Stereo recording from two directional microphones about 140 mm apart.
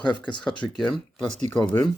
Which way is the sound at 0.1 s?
10° left (ahead or behind).